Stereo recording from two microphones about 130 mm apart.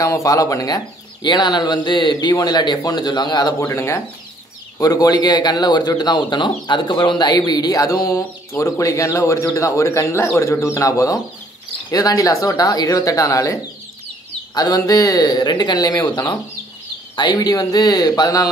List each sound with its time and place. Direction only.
0.0 s speech: 25° left (ahead or behind)